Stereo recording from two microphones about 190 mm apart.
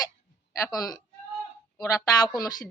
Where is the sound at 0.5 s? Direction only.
20° left (ahead or behind).